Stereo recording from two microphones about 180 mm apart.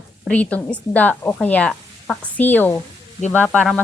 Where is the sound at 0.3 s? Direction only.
5° left (ahead or behind).